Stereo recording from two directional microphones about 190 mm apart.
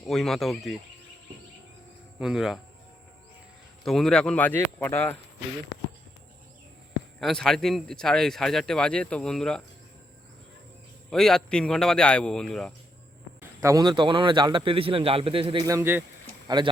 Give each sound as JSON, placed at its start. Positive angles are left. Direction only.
{"t": 0.0, "sound": "speech", "side_deg": 0}
{"t": 2.1, "sound": "speech", "side_deg": -5}
{"t": 3.8, "sound": "speech", "side_deg": 0}
{"t": 7.2, "sound": "speech", "side_deg": 0}
{"t": 11.1, "sound": "speech", "side_deg": 0}
{"t": 13.4, "sound": "a man's voice", "side_deg": -15}
{"t": 15.7, "sound": "a man's voice", "side_deg": -10}